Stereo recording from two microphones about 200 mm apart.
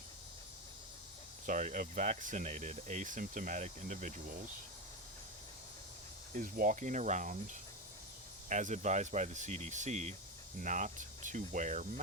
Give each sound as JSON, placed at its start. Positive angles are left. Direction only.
{"t": 1.5, "sound": "speech", "side_deg": -40}
{"t": 6.4, "sound": "speech", "side_deg": -40}
{"t": 8.4, "sound": "speech", "side_deg": -40}